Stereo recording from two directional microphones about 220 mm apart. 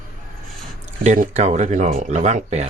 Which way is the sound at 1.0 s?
30° right (ahead or behind).